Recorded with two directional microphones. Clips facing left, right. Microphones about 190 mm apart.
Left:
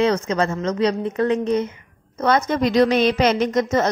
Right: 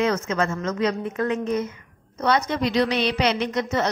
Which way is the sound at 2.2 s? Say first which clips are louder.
Left 3 dB; 50° left (ahead or behind).